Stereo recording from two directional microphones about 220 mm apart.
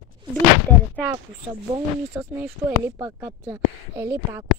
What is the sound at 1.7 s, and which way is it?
Speech, 15° right (ahead or behind).